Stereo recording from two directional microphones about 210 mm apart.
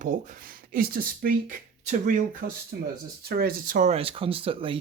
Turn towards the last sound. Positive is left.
turn(degrees=-25)  # may be behind; listen again after turning